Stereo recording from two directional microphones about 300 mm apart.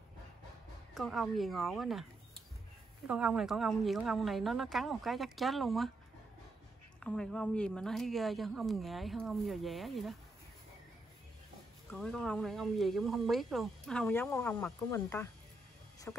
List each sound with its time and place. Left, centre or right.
0.9 s speech: centre
7.0 s speech: centre
11.9 s speech: centre